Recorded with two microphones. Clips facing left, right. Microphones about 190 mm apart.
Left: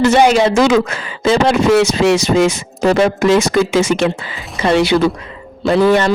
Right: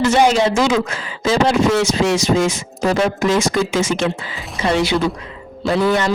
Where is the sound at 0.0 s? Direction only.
65° left (ahead or behind).